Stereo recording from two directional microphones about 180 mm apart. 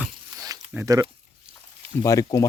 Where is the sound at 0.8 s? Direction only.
20° right (ahead or behind).